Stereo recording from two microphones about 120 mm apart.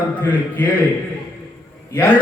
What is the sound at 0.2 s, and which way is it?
Speech, 15° left (ahead or behind).